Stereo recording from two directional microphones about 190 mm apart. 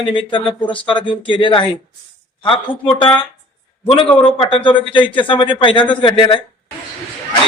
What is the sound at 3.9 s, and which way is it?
Speech, 25° left (ahead or behind).